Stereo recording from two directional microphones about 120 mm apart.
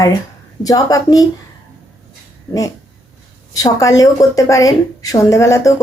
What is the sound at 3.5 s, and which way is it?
A woman's voice, 30° left (ahead or behind).